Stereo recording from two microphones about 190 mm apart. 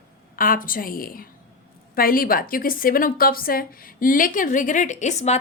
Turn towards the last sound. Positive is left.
turn(degrees=35)  # may be behind; listen again after turning